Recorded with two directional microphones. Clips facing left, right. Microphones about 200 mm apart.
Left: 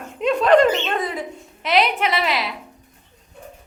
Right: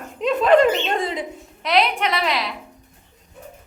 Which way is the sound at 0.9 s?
25° right (ahead or behind).